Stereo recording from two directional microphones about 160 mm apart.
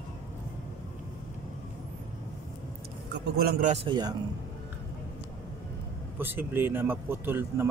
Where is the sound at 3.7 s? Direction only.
30° right (ahead or behind).